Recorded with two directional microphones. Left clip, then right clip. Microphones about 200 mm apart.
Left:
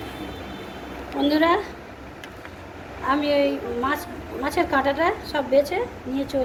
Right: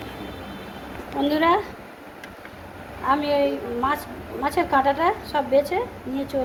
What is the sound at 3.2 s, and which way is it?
Speech, 45° right (ahead or behind).